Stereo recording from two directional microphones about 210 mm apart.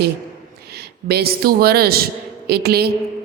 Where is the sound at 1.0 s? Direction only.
50° right (ahead or behind).